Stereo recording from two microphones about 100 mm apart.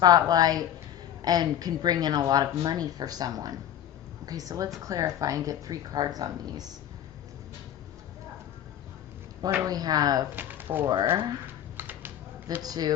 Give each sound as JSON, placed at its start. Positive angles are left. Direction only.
{"t": 0.0, "sound": "a woman's voice", "side_deg": -40}
{"t": 9.6, "sound": "a woman's voice", "side_deg": -40}
{"t": 10.3, "sound": "speech", "side_deg": -20}
{"t": 11.8, "sound": "typing", "side_deg": -20}
{"t": 12.6, "sound": "a woman's voice", "side_deg": -40}